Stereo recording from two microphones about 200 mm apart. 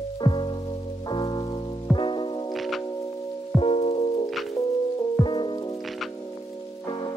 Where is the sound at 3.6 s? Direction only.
30° left (ahead or behind).